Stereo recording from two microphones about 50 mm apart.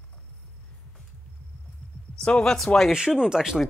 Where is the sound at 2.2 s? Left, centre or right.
Centre.